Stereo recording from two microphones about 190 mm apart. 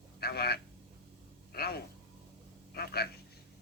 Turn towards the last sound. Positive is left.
turn(degrees=55)  # may be behind; listen again after turning